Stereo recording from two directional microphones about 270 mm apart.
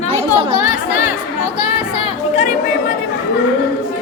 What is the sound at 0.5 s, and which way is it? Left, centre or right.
Speech, left.